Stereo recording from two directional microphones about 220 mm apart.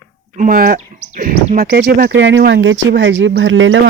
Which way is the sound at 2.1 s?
55° right (ahead or behind).